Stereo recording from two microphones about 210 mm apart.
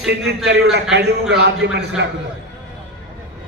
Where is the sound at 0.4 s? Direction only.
50° right (ahead or behind).